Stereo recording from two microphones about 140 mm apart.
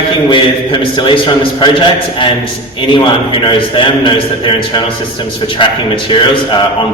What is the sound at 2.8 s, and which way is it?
A man's voice, 35° left (ahead or behind).